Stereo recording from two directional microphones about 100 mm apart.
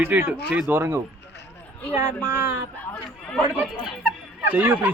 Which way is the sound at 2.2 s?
20° right (ahead or behind).